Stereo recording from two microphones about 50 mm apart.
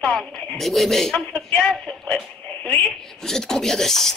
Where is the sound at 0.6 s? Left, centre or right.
Centre.